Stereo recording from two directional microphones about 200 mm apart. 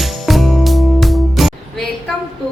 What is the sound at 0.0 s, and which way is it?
Music, centre (ahead or behind).